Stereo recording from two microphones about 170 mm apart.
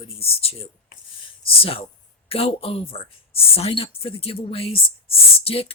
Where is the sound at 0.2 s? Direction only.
35° left (ahead or behind).